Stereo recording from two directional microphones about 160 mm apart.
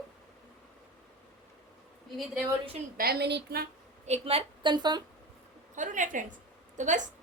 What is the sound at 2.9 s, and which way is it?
Speech, 75° right (ahead or behind).